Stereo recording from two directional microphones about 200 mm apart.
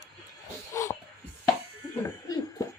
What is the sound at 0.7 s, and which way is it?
Dog, 15° left (ahead or behind).